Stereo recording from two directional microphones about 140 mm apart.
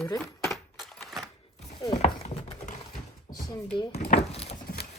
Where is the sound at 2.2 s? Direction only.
50° left (ahead or behind).